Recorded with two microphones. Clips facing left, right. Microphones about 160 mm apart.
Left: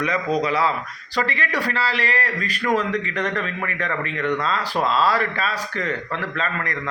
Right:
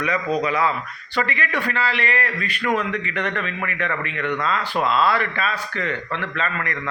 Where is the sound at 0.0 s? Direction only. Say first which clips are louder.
Even; 35° left (ahead or behind).